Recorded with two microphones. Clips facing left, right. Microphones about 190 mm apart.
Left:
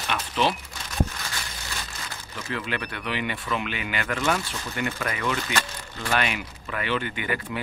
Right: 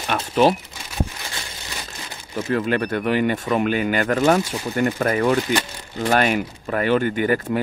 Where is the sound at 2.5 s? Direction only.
45° right (ahead or behind).